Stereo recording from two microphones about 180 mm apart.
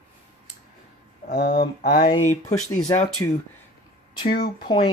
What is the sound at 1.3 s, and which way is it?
Speech, 60° left (ahead or behind).